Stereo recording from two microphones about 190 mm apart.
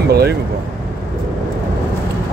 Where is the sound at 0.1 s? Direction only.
55° right (ahead or behind).